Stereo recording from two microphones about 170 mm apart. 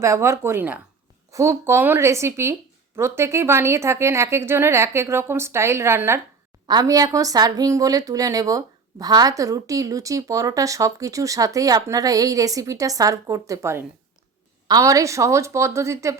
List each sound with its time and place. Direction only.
0.0 s a woman's voice: 15° right (ahead or behind)